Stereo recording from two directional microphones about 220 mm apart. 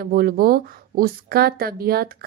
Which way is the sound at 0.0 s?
40° right (ahead or behind).